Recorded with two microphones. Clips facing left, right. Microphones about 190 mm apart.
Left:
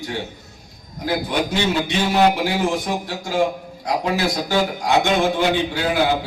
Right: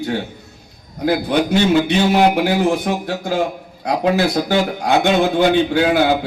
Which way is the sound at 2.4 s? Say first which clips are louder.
Right 5 dB; 60° right (ahead or behind).